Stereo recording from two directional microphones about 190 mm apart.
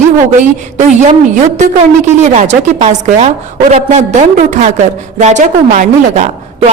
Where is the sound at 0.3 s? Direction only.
40° right (ahead or behind).